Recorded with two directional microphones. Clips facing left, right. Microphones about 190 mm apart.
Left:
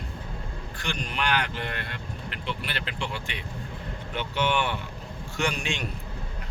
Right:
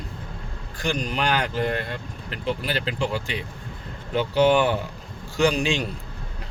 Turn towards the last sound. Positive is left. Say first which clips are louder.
# right 8 dB
turn(degrees=-35)  # may be behind; listen again after turning